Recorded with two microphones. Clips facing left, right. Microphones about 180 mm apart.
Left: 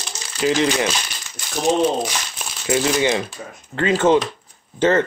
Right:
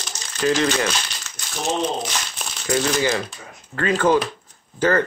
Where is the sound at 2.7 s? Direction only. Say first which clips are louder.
Left 2 dB; 20° left (ahead or behind).